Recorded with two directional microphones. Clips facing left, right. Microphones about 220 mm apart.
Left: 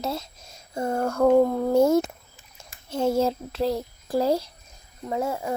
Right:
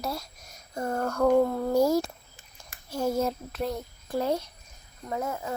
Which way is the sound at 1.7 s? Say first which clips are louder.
Left 4 dB; 25° left (ahead or behind).